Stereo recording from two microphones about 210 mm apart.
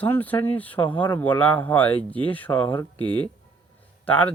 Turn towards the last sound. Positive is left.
turn(degrees=5)  # may be behind; listen again after turning